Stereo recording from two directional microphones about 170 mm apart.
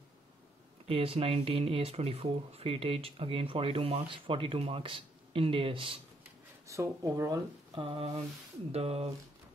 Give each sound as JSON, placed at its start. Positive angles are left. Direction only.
{"t": 0.8, "sound": "speech", "side_deg": -35}
{"t": 6.7, "sound": "speech", "side_deg": -20}